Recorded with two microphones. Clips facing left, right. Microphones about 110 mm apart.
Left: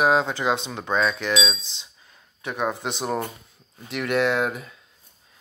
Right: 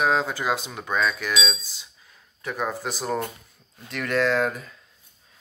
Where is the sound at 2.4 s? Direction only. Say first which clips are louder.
Left 2 dB; 10° left (ahead or behind).